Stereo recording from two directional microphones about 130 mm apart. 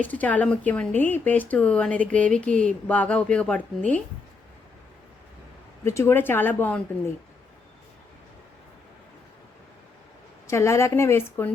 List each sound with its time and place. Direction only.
0.0 s speech: 10° left (ahead or behind)
5.8 s speech: 20° left (ahead or behind)
10.4 s a woman's voice: 20° left (ahead or behind)